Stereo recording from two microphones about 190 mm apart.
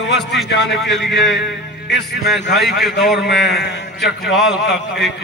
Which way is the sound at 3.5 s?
65° left (ahead or behind).